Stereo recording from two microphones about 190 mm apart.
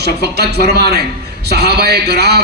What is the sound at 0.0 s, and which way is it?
A man's voice, 60° right (ahead or behind).